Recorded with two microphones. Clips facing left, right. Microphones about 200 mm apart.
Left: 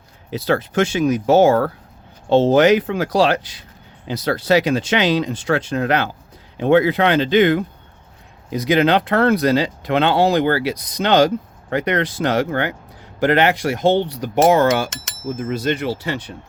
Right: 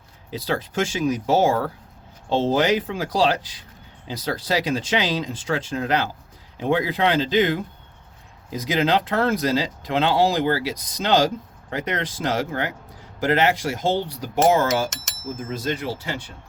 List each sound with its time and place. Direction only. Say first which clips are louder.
0.3 s speech: left 6 dB; 70° left (ahead or behind)